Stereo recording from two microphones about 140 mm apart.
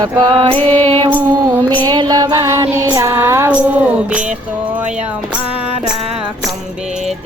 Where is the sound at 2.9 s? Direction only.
25° right (ahead or behind).